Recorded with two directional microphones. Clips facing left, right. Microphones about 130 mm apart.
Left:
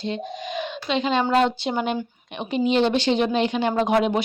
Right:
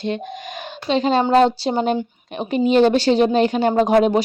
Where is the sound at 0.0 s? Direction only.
60° right (ahead or behind).